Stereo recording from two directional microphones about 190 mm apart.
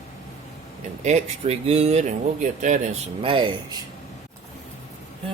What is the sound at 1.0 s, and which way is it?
Speech, 35° right (ahead or behind).